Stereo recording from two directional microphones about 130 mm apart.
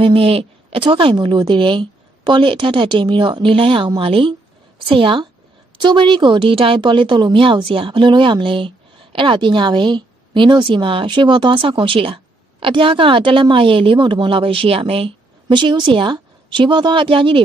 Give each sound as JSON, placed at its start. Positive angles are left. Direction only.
{"t": 0.0, "sound": "speech", "side_deg": -45}
{"t": 15.4, "sound": "speech", "side_deg": -35}